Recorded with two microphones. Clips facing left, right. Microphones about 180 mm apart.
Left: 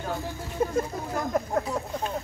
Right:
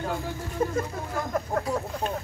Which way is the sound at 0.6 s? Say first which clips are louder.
Even; 20° left (ahead or behind).